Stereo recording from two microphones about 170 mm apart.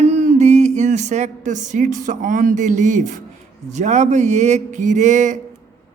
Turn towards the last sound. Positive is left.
turn(degrees=-45)  # may be behind; listen again after turning